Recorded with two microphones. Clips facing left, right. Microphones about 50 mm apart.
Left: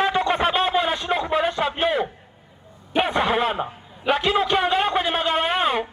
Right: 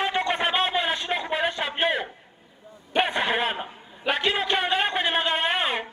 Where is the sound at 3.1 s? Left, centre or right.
Right.